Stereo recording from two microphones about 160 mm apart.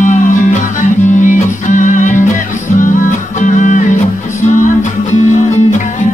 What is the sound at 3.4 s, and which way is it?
Music, 50° left (ahead or behind).